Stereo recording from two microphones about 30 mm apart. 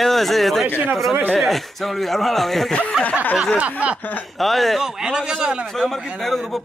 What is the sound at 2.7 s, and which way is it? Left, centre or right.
Speech, left.